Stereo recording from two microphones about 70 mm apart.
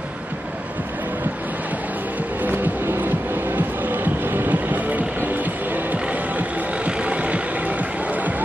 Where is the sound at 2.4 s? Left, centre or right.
Right.